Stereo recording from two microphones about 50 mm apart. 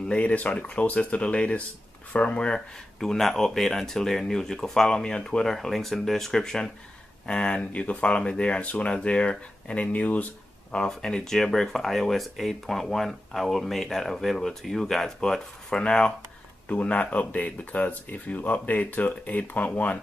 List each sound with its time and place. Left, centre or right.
0.1 s speech: left
3.0 s speech: centre; by 10.2 s left
10.9 s speech: centre; by 20.0 s left